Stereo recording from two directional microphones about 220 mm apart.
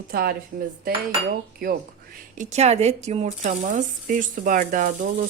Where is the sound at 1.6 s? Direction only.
40° right (ahead or behind).